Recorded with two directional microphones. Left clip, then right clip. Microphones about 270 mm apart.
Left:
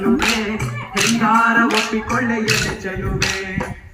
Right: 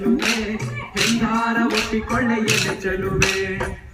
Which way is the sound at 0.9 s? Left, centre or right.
Centre.